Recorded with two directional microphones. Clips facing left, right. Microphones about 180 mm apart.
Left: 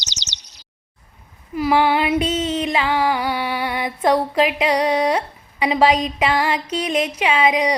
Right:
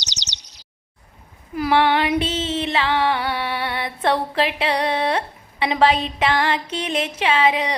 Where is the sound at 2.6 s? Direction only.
10° left (ahead or behind).